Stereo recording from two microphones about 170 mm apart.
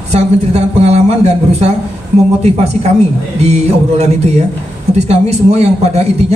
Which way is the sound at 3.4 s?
40° right (ahead or behind).